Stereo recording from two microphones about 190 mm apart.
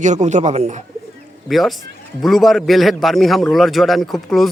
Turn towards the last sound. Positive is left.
turn(degrees=0)  # may be behind; listen again after turning